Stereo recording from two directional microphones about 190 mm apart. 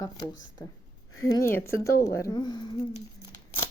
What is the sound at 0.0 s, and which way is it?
Speech, 20° left (ahead or behind).